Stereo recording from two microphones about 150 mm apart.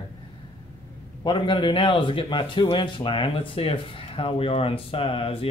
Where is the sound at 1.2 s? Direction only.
30° left (ahead or behind).